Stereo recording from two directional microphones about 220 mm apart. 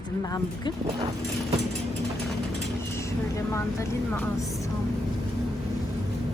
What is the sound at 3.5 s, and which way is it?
Speech, 10° left (ahead or behind).